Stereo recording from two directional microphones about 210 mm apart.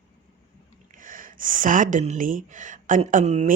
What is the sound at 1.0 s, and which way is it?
Speech, 40° right (ahead or behind).